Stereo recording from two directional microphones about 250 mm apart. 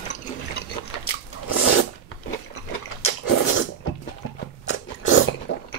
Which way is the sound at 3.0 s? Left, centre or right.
Left.